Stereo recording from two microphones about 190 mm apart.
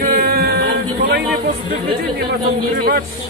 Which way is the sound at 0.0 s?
55° right (ahead or behind).